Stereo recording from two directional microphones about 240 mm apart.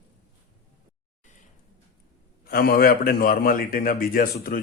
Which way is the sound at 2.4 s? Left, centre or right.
Left.